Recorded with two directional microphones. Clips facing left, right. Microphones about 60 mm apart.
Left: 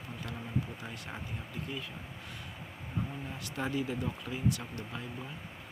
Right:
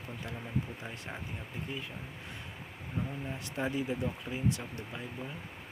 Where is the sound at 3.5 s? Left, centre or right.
Right.